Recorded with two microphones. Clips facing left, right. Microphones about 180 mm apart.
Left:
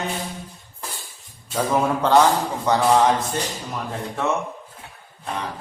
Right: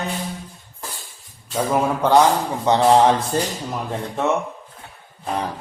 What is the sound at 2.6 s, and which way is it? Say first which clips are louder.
Speech: right 3 dB; 25° right (ahead or behind).